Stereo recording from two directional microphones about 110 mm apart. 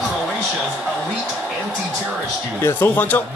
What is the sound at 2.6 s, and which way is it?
Speech, 20° left (ahead or behind).